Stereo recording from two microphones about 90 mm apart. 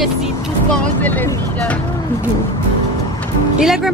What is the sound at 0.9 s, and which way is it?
Speech, 20° left (ahead or behind).